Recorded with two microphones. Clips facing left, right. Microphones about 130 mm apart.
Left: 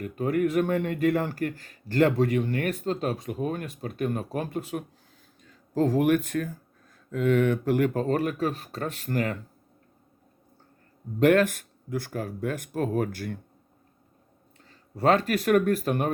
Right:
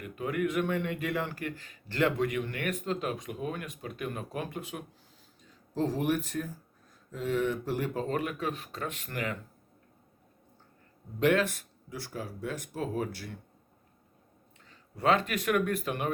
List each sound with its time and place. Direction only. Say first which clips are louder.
0.0 s speech: left 6 dB; 40° left (ahead or behind)
5.5 s speech: left 6 dB; 55° left (ahead or behind)
8.0 s speech: left 6 dB; 40° left (ahead or behind)
11.2 s speech: left 6 dB; 50° left (ahead or behind)
14.6 s speech: left 5 dB; 40° left (ahead or behind)